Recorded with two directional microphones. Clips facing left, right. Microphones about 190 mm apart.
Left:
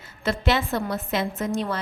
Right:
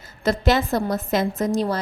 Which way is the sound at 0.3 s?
40° right (ahead or behind).